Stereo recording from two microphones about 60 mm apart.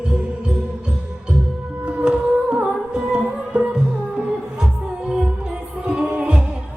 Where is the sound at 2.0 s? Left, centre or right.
Centre.